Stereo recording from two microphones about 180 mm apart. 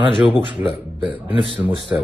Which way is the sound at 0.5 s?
10° right (ahead or behind).